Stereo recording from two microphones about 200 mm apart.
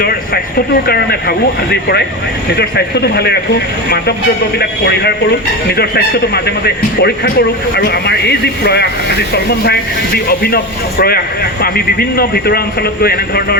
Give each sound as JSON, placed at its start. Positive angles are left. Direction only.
{"t": 0.9, "sound": "a man's voice", "side_deg": 55}